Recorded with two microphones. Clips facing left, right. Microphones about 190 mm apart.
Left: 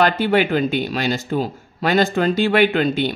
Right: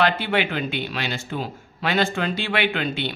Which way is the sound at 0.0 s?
40° left (ahead or behind).